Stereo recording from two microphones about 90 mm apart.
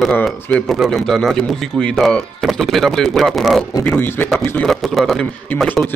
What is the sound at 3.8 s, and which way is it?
Speech, 25° left (ahead or behind).